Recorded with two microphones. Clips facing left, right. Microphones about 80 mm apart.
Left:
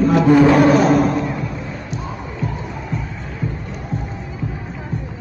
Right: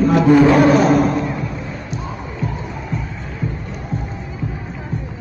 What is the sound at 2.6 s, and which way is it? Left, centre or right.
Music, centre.